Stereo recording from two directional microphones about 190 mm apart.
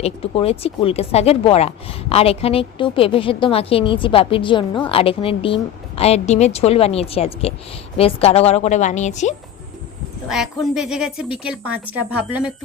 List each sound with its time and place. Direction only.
0.0 s speech: 30° left (ahead or behind)
10.2 s a woman's voice: centre (ahead or behind)